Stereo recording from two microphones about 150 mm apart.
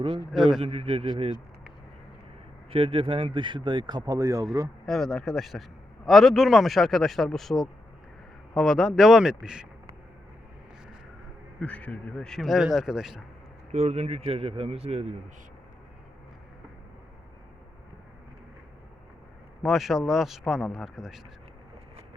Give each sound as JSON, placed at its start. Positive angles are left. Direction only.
{"t": 0.6, "sound": "speech", "side_deg": -40}
{"t": 2.6, "sound": "speech", "side_deg": -40}
{"t": 4.9, "sound": "speech", "side_deg": 0}
{"t": 11.6, "sound": "speech", "side_deg": 10}
{"t": 13.7, "sound": "speech", "side_deg": -45}
{"t": 19.6, "sound": "speech", "side_deg": 0}